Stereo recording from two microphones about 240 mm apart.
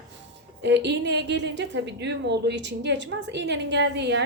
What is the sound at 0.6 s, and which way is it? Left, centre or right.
A woman's voice, right.